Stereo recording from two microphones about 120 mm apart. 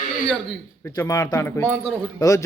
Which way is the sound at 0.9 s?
30° left (ahead or behind).